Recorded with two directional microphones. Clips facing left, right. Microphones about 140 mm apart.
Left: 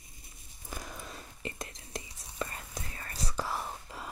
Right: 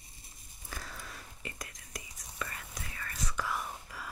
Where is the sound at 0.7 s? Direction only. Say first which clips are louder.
Left 3 dB; 15° left (ahead or behind).